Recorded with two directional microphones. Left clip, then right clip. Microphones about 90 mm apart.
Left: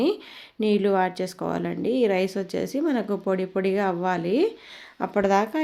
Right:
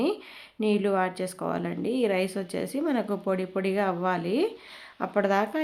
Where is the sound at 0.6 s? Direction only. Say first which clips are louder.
Left 3 dB; 35° left (ahead or behind).